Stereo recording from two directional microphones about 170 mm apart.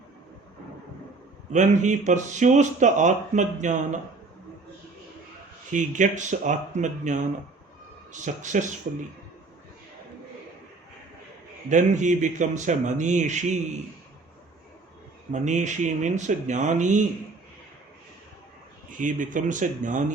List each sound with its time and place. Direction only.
1.5 s speech: 45° right (ahead or behind)
5.7 s speech: 45° right (ahead or behind)
11.7 s speech: 45° right (ahead or behind)
15.3 s speech: 45° right (ahead or behind)
18.9 s speech: 50° right (ahead or behind)